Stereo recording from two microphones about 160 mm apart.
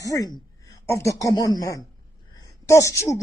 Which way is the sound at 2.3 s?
20° left (ahead or behind).